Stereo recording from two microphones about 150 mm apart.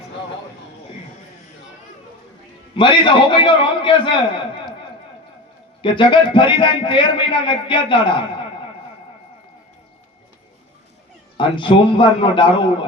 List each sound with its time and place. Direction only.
2.7 s a man's voice: 35° left (ahead or behind)
5.8 s a man's voice: 35° left (ahead or behind)
11.3 s a man's voice: 35° left (ahead or behind)